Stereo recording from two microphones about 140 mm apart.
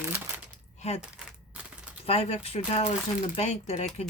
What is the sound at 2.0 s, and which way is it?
Speech, 45° left (ahead or behind).